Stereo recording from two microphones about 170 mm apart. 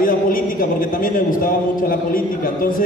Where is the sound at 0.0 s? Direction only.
55° left (ahead or behind).